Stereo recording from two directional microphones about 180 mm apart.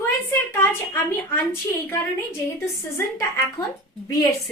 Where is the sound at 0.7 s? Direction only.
10° left (ahead or behind).